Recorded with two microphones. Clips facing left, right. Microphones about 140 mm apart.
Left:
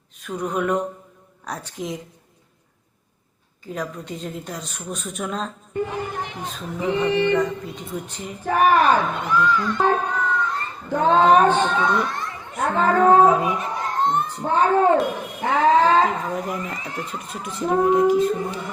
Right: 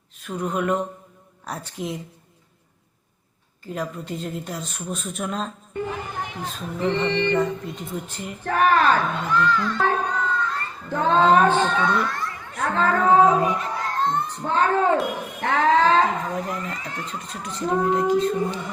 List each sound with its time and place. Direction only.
0.2 s a woman's voice: centre (ahead or behind)
3.7 s a woman's voice: centre (ahead or behind)
5.9 s a sound: 15° left (ahead or behind)
6.4 s speech: 10° left (ahead or behind)
7.3 s a woman's voice: centre (ahead or behind)
8.4 s a child's voice: 15° left (ahead or behind)